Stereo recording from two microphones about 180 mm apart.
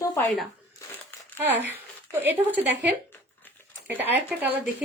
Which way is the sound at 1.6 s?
10° right (ahead or behind).